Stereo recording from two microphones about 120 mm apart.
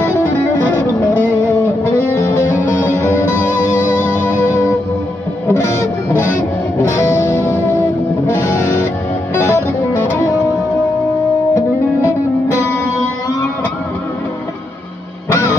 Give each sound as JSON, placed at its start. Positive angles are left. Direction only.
{"t": 3.0, "sound": "music", "side_deg": 20}
{"t": 3.3, "sound": "music", "side_deg": -15}
{"t": 5.5, "sound": "music", "side_deg": 25}
{"t": 9.4, "sound": "music", "side_deg": 20}